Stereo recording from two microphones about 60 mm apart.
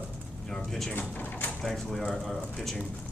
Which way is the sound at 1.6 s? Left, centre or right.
Centre.